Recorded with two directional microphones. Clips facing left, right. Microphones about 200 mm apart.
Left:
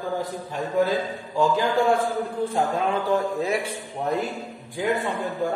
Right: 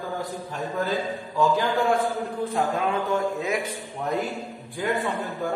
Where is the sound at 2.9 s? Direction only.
30° left (ahead or behind).